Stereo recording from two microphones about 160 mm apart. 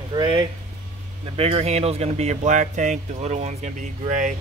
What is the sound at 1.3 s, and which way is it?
Speech, 40° right (ahead or behind).